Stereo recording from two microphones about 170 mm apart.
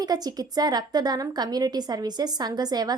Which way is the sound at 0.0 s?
25° right (ahead or behind).